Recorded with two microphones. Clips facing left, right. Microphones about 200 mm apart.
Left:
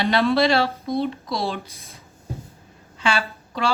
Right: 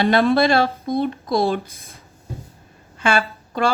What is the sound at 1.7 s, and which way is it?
Speech, centre (ahead or behind).